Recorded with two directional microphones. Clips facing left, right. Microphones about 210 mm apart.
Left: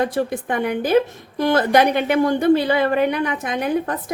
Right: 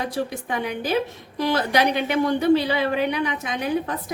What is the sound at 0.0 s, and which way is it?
A woman's voice, 55° left (ahead or behind).